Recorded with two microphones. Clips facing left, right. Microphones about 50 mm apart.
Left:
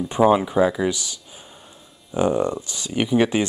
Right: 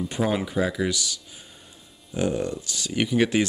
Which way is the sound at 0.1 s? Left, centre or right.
Left.